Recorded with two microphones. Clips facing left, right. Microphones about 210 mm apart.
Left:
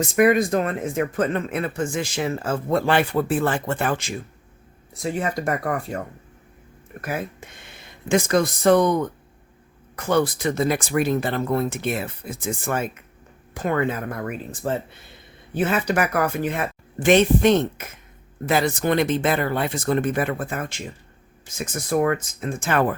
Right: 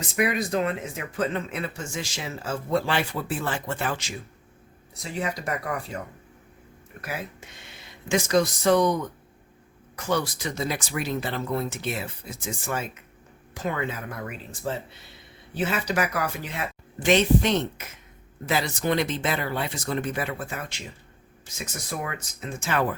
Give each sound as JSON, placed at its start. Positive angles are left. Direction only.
{"t": 0.2, "sound": "speech", "side_deg": 50}
{"t": 7.0, "sound": "speech", "side_deg": 50}